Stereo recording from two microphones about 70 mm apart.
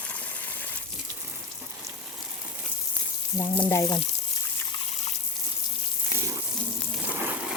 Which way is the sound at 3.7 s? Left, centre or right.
Left.